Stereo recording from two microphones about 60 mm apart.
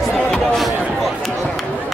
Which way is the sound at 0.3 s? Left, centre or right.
Centre.